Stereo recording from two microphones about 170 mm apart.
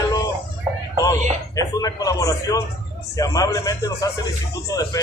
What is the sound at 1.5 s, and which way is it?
Speech, 20° left (ahead or behind).